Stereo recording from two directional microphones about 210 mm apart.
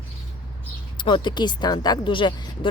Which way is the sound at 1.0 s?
20° left (ahead or behind).